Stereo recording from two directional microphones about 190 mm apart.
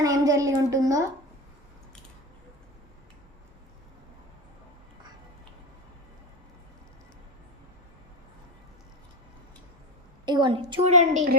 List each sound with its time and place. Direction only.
0.0 s a woman's voice: 20° right (ahead or behind)
10.2 s a woman's voice: 25° right (ahead or behind)